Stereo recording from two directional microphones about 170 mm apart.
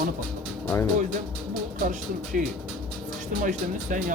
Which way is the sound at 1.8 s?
50° right (ahead or behind).